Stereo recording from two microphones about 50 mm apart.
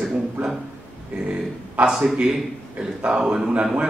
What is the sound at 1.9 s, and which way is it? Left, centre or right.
Speech, centre.